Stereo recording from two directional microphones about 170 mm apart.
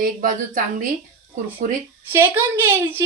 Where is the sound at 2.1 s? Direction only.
15° right (ahead or behind).